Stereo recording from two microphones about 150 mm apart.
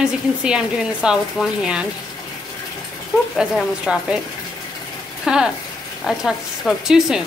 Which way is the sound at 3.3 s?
5° right (ahead or behind).